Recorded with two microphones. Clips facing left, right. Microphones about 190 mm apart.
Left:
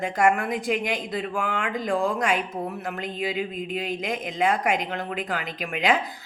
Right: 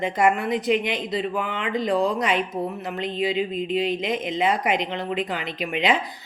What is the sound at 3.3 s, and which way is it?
Speech, 50° left (ahead or behind).